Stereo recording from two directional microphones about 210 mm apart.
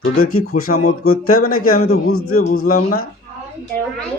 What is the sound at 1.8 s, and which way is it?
Speech, 90° left.